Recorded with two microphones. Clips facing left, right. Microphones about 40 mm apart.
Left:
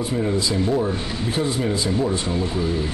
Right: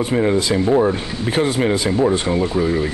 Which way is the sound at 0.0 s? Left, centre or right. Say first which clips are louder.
Right 5 dB; right.